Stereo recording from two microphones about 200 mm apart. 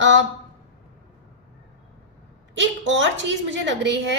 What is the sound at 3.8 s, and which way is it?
Speech, 65° right (ahead or behind).